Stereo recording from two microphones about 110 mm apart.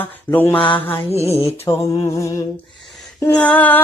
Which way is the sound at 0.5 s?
50° left (ahead or behind).